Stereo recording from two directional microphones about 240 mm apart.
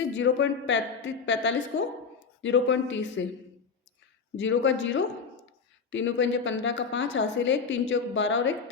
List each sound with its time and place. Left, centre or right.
0.1 s a woman's voice: left
4.4 s a woman's voice: left